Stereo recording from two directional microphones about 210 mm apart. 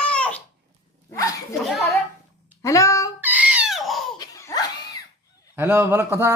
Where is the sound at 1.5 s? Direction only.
Centre (ahead or behind).